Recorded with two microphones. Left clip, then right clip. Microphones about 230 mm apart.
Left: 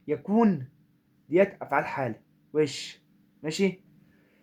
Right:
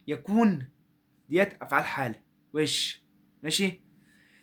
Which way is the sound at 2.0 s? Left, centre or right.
Right.